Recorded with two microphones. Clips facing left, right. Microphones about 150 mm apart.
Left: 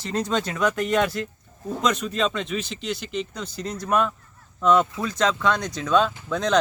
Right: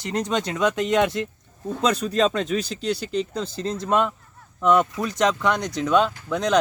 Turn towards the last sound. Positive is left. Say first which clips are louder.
# right 1 dB
turn(degrees=-15)  # may be behind; listen again after turning